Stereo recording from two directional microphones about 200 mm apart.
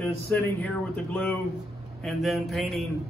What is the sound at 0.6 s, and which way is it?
Speech, 5° left (ahead or behind).